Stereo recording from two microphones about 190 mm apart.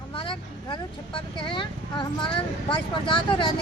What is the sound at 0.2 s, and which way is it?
A woman's voice, 25° left (ahead or behind).